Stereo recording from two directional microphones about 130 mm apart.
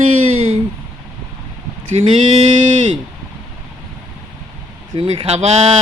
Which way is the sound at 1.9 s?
50° right (ahead or behind).